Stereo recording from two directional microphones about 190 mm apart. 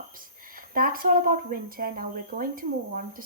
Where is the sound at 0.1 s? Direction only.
45° right (ahead or behind).